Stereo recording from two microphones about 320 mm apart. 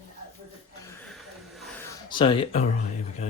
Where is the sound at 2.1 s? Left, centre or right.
Centre.